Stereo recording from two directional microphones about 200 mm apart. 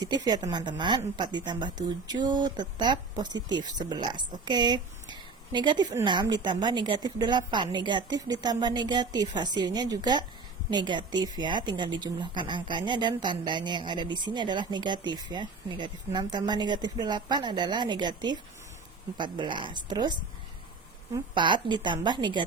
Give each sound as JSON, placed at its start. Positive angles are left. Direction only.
{"t": 0.0, "sound": "a woman's voice", "side_deg": -20}
{"t": 21.3, "sound": "a woman's voice", "side_deg": -25}